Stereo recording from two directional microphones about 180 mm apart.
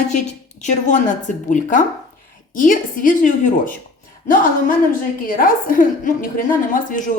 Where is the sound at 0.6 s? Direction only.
40° left (ahead or behind).